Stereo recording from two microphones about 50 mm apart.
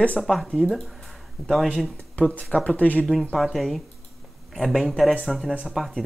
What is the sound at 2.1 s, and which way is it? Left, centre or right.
Speech, left.